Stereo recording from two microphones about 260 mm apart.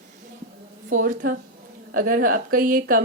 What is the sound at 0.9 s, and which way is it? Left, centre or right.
Speech, right.